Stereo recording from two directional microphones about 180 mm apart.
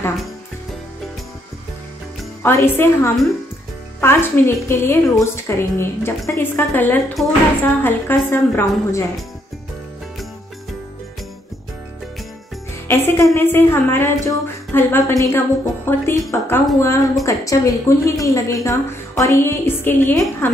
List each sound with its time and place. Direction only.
2.4 s a woman's voice: 15° left (ahead or behind)
12.8 s a woman's voice: 15° left (ahead or behind)